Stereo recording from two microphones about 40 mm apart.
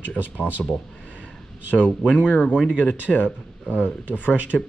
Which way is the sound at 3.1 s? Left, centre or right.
Left.